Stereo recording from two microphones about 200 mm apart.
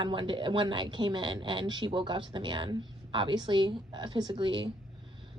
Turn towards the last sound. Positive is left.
turn(degrees=-25)  # may be behind; listen again after turning